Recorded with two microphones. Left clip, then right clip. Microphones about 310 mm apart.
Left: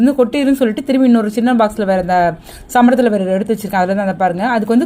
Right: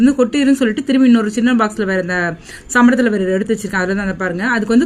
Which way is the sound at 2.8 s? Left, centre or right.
Left.